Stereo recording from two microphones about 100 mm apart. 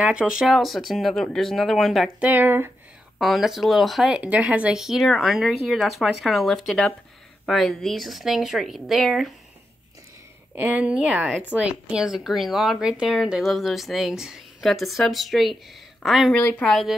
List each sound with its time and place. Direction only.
0.0 s speech: 10° right (ahead or behind)
2.1 s speech: 15° right (ahead or behind)
3.2 s speech: centre (ahead or behind)
4.2 s speech: 15° right (ahead or behind)
10.5 s speech: 20° right (ahead or behind); by 16.3 s centre (ahead or behind)
16.3 s a woman's voice: 15° left (ahead or behind)
16.6 s speech: 5° left (ahead or behind)